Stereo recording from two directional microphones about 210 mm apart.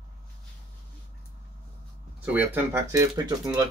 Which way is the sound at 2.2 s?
10° right (ahead or behind).